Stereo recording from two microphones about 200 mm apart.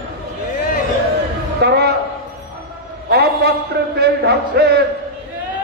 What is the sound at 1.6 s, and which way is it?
Speech, 55° right (ahead or behind).